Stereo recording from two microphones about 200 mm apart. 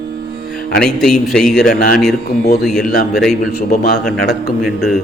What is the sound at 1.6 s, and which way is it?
Speech, 45° left (ahead or behind).